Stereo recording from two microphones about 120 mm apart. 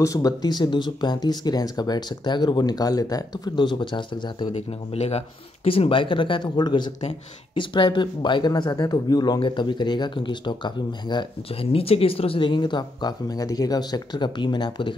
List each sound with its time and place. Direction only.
0.0 s speech: 30° left (ahead or behind)
4.6 s speech: 60° left (ahead or behind); by 11.2 s 40° left (ahead or behind)
11.6 s speech: 55° left (ahead or behind)